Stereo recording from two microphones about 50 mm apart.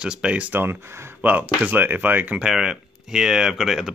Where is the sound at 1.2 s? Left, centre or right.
Right.